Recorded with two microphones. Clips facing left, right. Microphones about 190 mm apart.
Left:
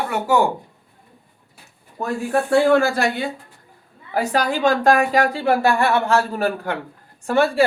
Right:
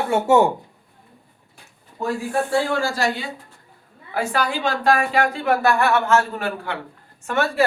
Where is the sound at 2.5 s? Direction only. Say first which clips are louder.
Left 10 dB; 60° left (ahead or behind).